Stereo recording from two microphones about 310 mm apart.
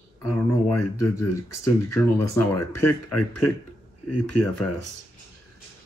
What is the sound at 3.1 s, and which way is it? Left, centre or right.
Speech, left.